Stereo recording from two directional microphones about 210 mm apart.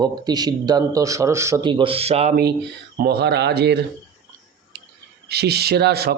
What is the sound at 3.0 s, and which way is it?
Speech, 50° right (ahead or behind).